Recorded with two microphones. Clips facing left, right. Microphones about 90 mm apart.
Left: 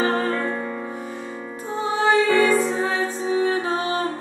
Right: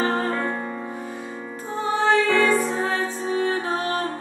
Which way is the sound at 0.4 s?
30° right (ahead or behind).